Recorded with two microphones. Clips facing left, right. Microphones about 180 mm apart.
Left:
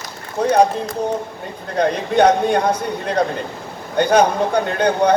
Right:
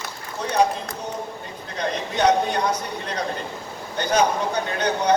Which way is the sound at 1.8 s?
55° left (ahead or behind).